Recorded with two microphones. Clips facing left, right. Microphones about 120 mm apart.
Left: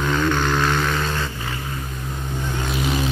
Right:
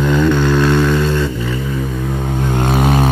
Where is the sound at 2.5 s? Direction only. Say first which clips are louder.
Right 9 dB; 55° right (ahead or behind).